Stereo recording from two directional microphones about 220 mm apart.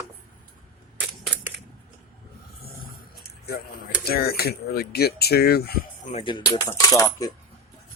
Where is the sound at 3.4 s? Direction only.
45° left (ahead or behind).